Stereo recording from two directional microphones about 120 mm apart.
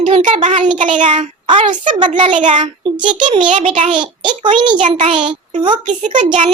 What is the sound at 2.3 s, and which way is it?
Speech, 90° right.